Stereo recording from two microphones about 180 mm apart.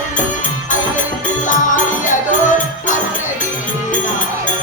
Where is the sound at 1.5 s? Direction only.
45° left (ahead or behind).